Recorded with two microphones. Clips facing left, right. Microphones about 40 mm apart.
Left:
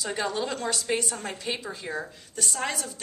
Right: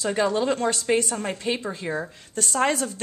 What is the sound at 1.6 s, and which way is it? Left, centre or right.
Speech, right.